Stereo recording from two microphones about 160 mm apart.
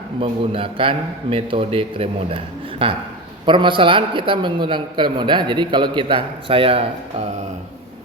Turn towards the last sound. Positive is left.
turn(degrees=-40)  # may be behind; listen again after turning